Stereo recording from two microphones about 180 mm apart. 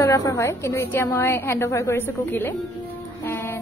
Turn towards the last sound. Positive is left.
turn(degrees=10)  # may be behind; listen again after turning